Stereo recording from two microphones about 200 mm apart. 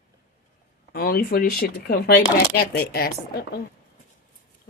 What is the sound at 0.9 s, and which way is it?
Speech, 50° left (ahead or behind).